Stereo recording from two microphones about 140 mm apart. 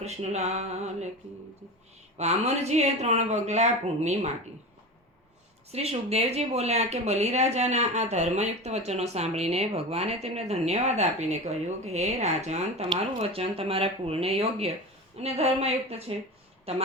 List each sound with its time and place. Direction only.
0.0 s a woman's voice: 50° right (ahead or behind)
2.1 s a woman's voice: 50° right (ahead or behind)
5.7 s a woman's voice: 50° right (ahead or behind)